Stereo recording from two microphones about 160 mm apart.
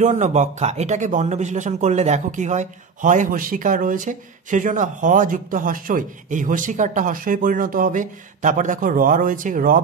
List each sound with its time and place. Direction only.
0.0 s speech: 50° right (ahead or behind)